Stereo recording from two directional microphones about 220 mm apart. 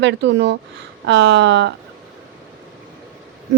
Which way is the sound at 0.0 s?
55° right (ahead or behind).